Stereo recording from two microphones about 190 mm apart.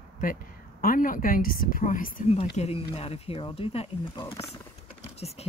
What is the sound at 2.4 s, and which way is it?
Speech, 30° left (ahead or behind).